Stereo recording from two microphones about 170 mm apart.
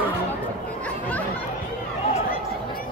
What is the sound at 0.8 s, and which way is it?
Chatter, 10° left (ahead or behind).